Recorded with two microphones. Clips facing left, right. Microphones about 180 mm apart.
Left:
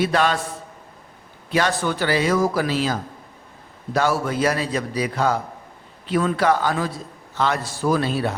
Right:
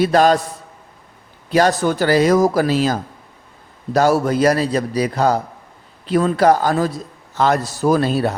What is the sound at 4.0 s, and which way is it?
A man's voice, 40° right (ahead or behind).